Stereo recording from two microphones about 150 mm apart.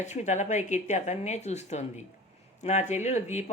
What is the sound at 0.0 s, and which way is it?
Speech, 50° left (ahead or behind).